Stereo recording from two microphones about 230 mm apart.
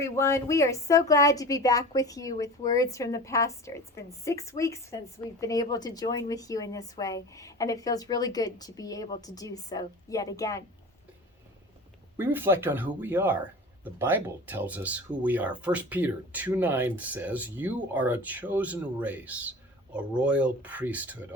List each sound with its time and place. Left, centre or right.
0.0 s a woman's voice: centre
12.1 s speech: centre